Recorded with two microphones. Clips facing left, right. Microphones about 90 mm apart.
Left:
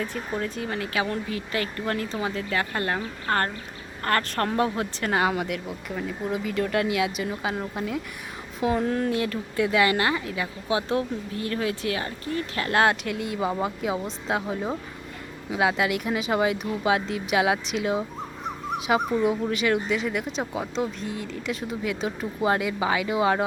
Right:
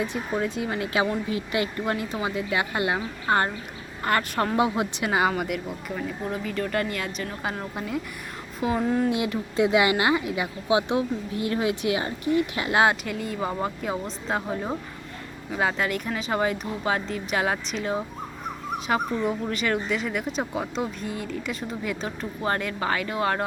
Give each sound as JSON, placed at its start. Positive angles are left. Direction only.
{"t": 0.0, "sound": "a woman's voice", "side_deg": -20}
{"t": 5.1, "sound": "a woman's voice", "side_deg": 0}